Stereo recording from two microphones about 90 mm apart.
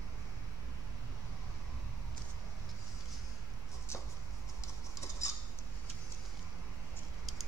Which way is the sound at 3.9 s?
30° left (ahead or behind).